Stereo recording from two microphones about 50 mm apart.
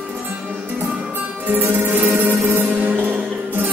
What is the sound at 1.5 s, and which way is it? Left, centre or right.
Music, right.